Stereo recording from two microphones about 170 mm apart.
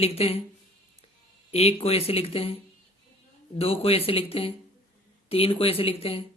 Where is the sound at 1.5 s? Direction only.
35° left (ahead or behind).